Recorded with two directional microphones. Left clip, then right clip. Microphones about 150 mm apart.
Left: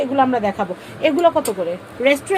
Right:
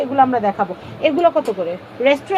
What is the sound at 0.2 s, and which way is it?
A woman's voice, 30° left (ahead or behind).